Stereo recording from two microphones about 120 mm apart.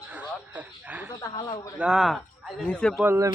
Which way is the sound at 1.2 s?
40° left (ahead or behind).